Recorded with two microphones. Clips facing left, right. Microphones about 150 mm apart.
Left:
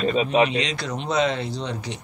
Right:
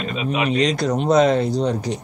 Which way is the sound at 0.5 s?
45° right (ahead or behind).